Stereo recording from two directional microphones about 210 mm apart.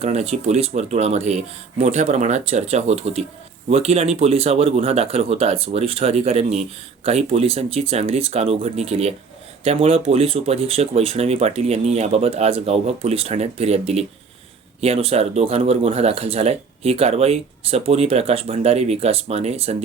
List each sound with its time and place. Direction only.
0.0 s speech: 30° right (ahead or behind)